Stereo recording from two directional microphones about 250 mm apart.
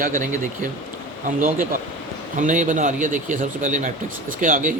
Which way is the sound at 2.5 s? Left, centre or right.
Right.